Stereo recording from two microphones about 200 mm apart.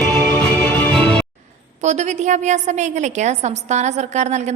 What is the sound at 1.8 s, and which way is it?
A woman's voice, 35° right (ahead or behind).